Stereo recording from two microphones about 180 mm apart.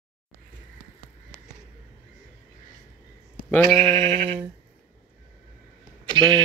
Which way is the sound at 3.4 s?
10° left (ahead or behind).